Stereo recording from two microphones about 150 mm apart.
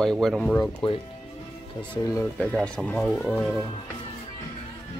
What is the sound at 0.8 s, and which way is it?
Speech, 35° left (ahead or behind).